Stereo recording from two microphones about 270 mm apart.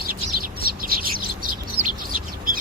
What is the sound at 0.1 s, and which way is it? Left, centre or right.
Bird, right.